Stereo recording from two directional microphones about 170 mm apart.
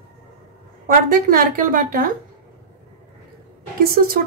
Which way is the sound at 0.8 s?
55° right (ahead or behind).